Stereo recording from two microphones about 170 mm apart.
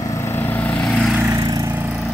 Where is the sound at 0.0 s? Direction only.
20° left (ahead or behind); by 1.1 s centre (ahead or behind).